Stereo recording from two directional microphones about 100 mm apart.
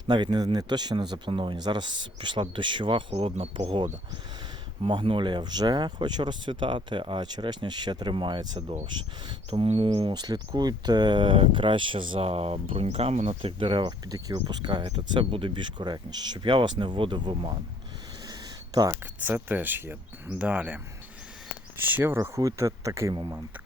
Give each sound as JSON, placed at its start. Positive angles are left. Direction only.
{"t": 0.1, "sound": "speech", "side_deg": -45}
{"t": 3.1, "sound": "speech", "side_deg": -80}
{"t": 4.8, "sound": "speech", "side_deg": -60}
{"t": 9.5, "sound": "bird", "side_deg": -65}
{"t": 10.2, "sound": "speech", "side_deg": -45}
{"t": 14.1, "sound": "speech", "side_deg": -40}
{"t": 18.3, "sound": "a sound", "side_deg": -40}
{"t": 19.2, "sound": "speech", "side_deg": -20}
{"t": 22.4, "sound": "speech", "side_deg": -35}